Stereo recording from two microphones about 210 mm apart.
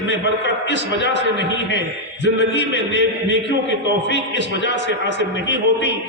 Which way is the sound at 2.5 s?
60° left (ahead or behind).